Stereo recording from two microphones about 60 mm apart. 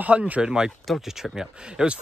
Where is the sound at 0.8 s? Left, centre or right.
Centre.